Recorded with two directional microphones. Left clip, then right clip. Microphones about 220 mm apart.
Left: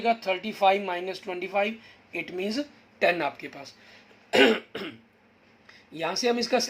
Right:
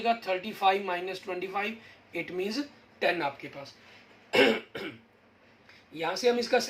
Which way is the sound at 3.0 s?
50° left (ahead or behind).